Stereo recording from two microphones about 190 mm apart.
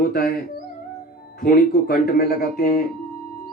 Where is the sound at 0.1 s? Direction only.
50° left (ahead or behind).